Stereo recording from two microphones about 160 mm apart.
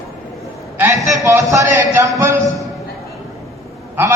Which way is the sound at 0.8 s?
20° right (ahead or behind).